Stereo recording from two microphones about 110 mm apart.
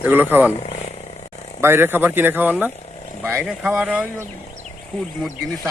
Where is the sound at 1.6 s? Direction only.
20° right (ahead or behind).